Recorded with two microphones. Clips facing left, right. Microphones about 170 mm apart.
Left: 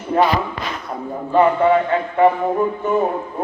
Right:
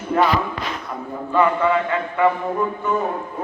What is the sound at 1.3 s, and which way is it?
A man's voice, 35° left (ahead or behind).